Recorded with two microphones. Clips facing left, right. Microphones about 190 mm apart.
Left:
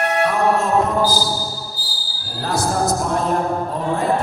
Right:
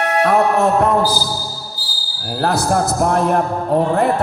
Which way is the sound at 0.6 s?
65° right (ahead or behind).